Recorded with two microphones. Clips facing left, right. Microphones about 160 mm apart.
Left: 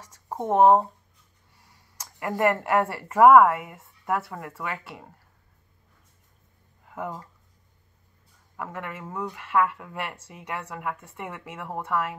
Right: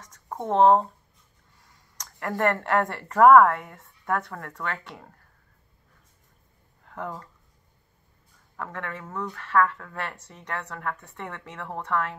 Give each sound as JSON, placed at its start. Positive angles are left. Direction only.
{"t": 0.0, "sound": "speech", "side_deg": 10}
{"t": 6.8, "sound": "a sound", "side_deg": 5}
{"t": 8.5, "sound": "speech", "side_deg": 10}